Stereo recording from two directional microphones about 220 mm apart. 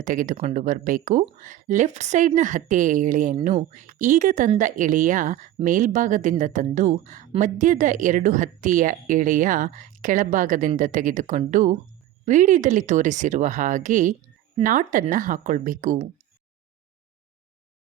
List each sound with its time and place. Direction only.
0.0 s speech: 40° right (ahead or behind)